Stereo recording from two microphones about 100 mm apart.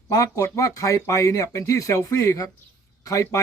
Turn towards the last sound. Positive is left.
turn(degrees=35)  # may be behind; listen again after turning